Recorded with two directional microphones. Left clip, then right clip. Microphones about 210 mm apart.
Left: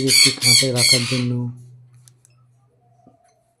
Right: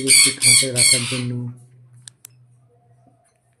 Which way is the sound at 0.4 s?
30° left (ahead or behind).